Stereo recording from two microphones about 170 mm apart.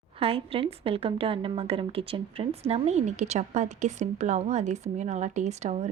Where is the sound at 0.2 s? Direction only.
35° right (ahead or behind).